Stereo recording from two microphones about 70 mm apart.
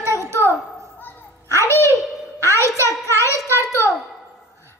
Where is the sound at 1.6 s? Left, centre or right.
Left.